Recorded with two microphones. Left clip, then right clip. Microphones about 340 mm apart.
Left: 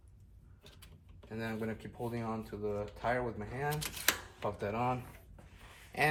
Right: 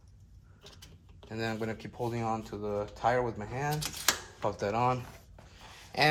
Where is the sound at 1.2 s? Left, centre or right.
Centre.